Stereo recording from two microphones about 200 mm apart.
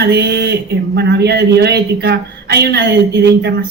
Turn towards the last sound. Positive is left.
turn(degrees=-55)  # may be behind; listen again after turning